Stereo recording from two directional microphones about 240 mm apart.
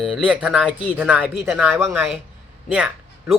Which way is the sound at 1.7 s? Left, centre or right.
Centre.